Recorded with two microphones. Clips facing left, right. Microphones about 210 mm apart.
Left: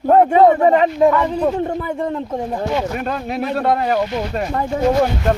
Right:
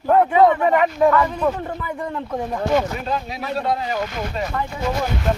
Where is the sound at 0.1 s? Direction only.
40° left (ahead or behind).